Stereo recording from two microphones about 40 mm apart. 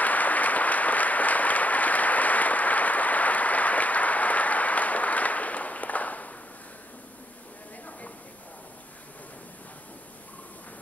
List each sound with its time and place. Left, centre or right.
0.0 s applause: left